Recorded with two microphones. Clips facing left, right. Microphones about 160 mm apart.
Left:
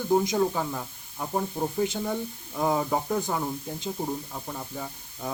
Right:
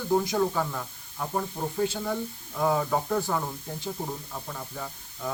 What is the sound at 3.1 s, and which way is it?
Speech, 20° left (ahead or behind).